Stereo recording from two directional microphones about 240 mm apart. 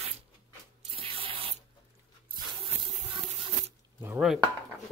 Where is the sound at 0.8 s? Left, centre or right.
Right.